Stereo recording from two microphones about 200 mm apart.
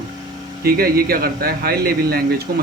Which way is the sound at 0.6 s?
50° right (ahead or behind).